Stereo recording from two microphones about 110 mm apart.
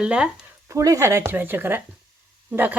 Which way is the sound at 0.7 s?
30° right (ahead or behind).